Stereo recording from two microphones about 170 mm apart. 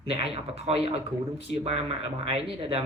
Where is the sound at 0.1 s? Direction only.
35° right (ahead or behind).